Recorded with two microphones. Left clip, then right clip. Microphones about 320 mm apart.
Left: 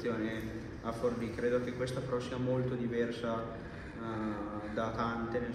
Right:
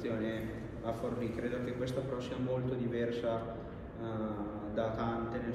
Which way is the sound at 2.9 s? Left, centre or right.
Left.